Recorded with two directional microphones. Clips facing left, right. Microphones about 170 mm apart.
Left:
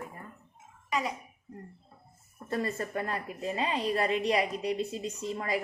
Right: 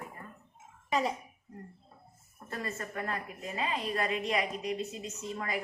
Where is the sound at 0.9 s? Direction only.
30° right (ahead or behind).